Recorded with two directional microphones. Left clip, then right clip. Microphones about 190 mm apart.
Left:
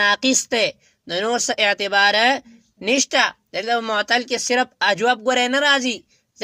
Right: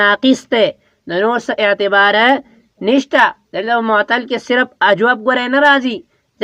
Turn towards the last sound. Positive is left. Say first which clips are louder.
# right 6 dB
turn(degrees=20)  # may be behind; listen again after turning